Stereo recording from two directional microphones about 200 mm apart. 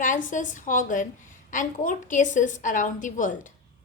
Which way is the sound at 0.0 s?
40° left (ahead or behind).